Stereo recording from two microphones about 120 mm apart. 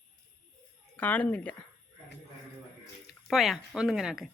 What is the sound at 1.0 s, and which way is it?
Speech, 15° left (ahead or behind).